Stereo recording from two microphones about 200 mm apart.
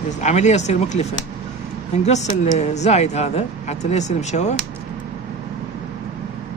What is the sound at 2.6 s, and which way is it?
Speech, 35° left (ahead or behind).